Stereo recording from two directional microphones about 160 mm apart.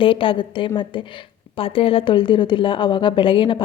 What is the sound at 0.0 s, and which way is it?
A woman's voice, 35° left (ahead or behind).